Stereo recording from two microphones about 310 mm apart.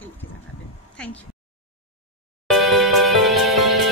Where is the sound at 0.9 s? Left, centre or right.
Centre.